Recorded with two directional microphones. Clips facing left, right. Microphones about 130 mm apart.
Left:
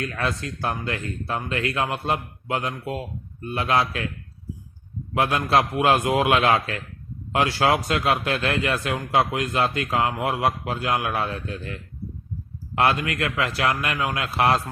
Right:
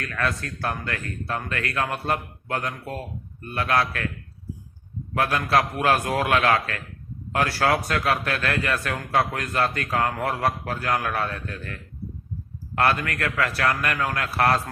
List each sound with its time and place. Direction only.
0.1 s speech: 25° left (ahead or behind)
5.1 s speech: 25° left (ahead or behind)